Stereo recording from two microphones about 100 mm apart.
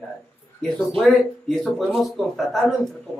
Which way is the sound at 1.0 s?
5° left (ahead or behind).